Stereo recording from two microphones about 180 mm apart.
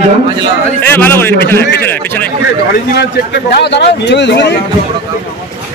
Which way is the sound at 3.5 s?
70° left (ahead or behind).